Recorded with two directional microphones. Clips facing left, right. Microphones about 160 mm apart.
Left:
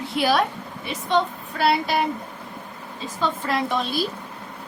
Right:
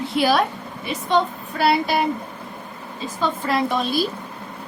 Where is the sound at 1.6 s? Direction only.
5° right (ahead or behind).